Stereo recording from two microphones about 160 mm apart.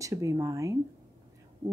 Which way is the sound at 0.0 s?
20° right (ahead or behind).